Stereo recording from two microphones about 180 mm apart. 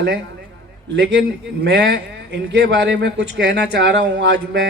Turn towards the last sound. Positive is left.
turn(degrees=-75)  # may be behind; listen again after turning